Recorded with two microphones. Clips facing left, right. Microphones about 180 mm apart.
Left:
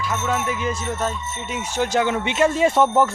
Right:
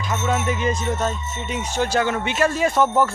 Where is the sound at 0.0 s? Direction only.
5° left (ahead or behind).